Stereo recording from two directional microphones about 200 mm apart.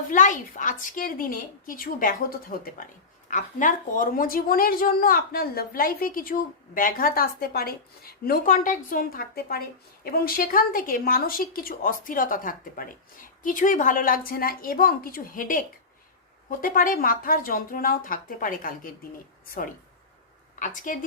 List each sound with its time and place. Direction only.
0.1 s a woman's voice: 40° left (ahead or behind)
20.6 s a woman's voice: 40° left (ahead or behind)